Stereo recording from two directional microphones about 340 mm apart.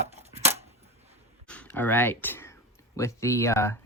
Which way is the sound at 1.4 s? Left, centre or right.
Centre.